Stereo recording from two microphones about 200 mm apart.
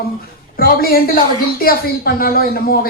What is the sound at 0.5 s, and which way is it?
Speech, 50° left (ahead or behind).